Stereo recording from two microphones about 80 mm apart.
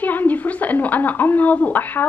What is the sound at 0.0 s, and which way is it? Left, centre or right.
A woman's voice, left.